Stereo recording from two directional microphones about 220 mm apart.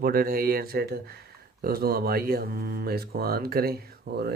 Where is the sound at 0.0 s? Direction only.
45° right (ahead or behind).